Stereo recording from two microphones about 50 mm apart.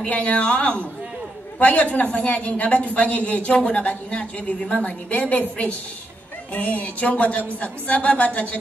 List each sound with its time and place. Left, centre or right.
0.0 s a woman's voice: left